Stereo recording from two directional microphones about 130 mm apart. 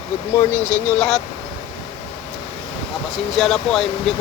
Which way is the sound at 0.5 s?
10° left (ahead or behind).